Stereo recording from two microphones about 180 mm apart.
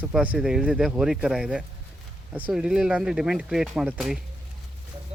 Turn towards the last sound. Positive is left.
turn(degrees=0)  # may be behind; listen again after turning